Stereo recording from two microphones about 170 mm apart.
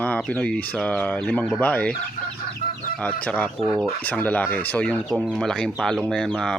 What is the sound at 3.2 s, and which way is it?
Speech, 10° left (ahead or behind).